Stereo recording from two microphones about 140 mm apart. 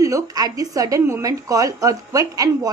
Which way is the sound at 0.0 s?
25° right (ahead or behind).